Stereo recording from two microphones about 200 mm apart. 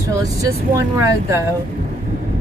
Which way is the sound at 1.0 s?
15° right (ahead or behind).